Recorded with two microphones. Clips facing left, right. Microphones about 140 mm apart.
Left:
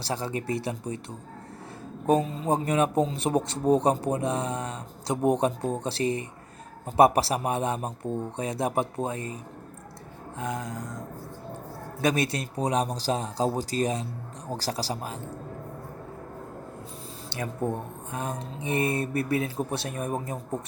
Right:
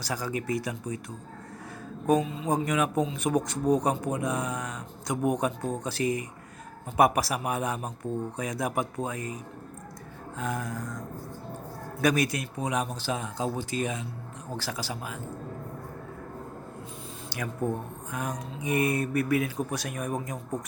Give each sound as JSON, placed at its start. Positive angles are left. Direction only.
{"t": 0.0, "sound": "speech", "side_deg": 30}
{"t": 2.0, "sound": "a man's voice", "side_deg": 35}
{"t": 12.0, "sound": "a man's voice", "side_deg": 25}
{"t": 17.2, "sound": "speech", "side_deg": 25}